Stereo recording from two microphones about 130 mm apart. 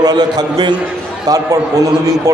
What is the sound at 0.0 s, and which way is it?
A man's voice, 30° right (ahead or behind).